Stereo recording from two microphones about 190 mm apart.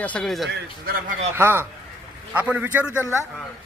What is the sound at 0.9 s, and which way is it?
Speech, 50° right (ahead or behind).